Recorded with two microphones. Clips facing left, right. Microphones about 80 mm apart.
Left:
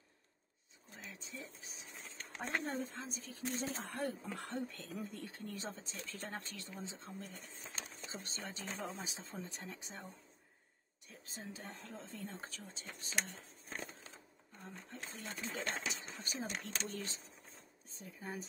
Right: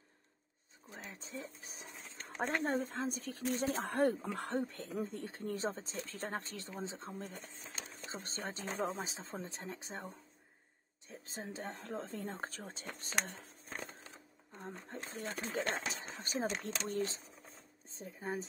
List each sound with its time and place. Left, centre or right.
0.9 s a sound: right
2.6 s speech: right
4.6 s speech: right
11.3 s speech: right
13.7 s a sound: centre
14.7 s speech: right